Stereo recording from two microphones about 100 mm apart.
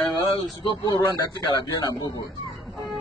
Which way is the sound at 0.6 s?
45° left (ahead or behind).